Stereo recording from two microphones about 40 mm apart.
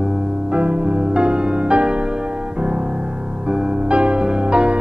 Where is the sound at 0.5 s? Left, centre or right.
Right.